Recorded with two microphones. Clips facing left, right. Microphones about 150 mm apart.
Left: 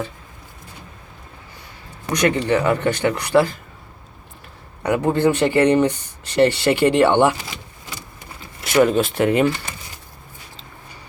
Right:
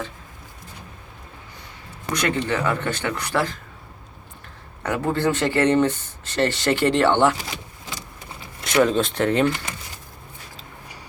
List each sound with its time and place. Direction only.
2.1 s speech: 20° left (ahead or behind)
4.8 s speech: 15° left (ahead or behind)
8.6 s speech: 5° left (ahead or behind)